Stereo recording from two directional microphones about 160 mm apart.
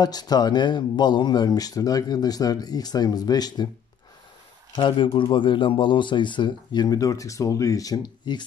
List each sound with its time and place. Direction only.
0.0 s speech: 25° left (ahead or behind)
4.7 s speech: 30° left (ahead or behind)